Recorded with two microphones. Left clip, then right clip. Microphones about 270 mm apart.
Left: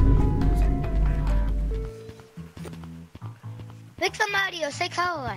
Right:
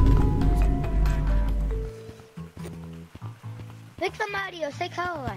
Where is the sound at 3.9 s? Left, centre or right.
Centre.